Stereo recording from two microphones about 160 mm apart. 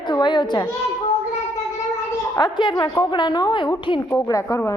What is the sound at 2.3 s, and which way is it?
A woman's voice, 25° left (ahead or behind).